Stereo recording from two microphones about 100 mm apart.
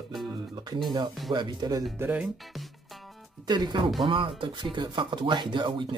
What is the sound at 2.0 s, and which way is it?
Speech, 15° right (ahead or behind).